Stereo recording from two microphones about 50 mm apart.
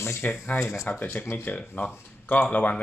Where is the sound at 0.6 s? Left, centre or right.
Left.